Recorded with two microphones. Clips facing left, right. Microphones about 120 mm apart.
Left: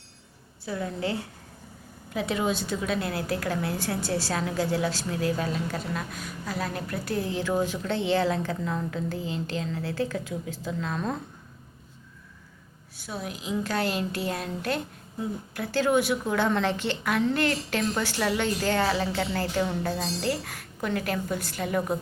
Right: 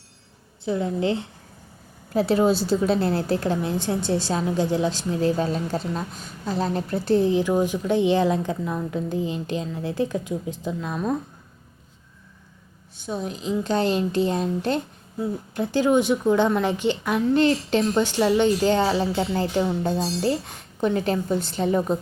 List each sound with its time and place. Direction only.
0.6 s a woman's voice: 25° right (ahead or behind)
2.1 s a woman's voice: 35° right (ahead or behind); by 11.2 s 15° right (ahead or behind)
13.0 s a woman's voice: 25° right (ahead or behind)